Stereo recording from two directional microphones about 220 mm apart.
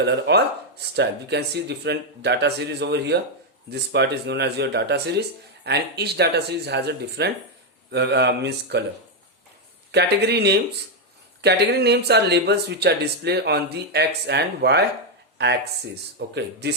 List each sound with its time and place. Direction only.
0.0 s speech: 50° right (ahead or behind)
9.9 s speech: 50° right (ahead or behind)